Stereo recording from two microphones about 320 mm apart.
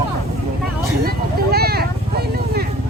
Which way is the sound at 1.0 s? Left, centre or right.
Right.